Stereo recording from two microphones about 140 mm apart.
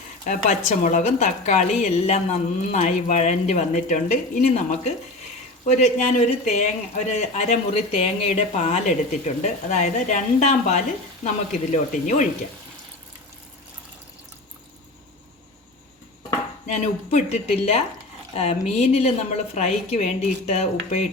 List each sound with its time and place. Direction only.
0.7 s speech: 60° left (ahead or behind)
16.6 s a woman's voice: 55° left (ahead or behind)